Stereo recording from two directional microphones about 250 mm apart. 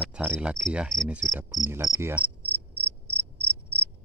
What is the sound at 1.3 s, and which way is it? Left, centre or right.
Cricket, centre.